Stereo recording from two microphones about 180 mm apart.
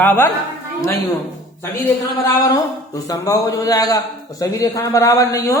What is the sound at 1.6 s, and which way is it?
Speech, 20° left (ahead or behind).